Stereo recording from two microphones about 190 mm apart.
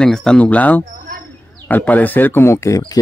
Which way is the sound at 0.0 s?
5° left (ahead or behind).